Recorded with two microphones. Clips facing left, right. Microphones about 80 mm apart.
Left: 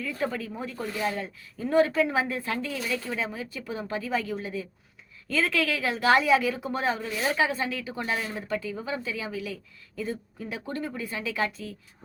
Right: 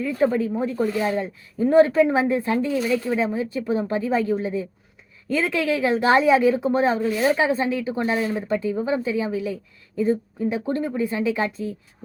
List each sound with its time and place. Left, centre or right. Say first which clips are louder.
0.0 s a woman's voice: right 10 dB; right